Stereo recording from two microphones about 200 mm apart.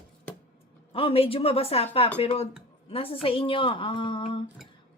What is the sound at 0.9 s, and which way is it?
A woman's voice, 30° left (ahead or behind).